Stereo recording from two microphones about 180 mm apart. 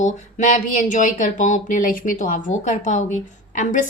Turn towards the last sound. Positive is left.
turn(degrees=45)  # may be behind; listen again after turning